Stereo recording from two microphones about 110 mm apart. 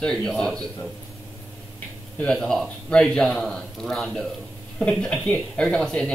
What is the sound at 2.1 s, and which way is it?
A man's voice, 5° left (ahead or behind).